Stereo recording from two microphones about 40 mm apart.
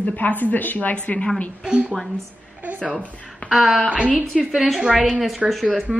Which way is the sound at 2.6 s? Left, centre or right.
Right.